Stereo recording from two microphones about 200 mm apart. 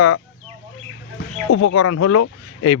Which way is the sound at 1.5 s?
80° left.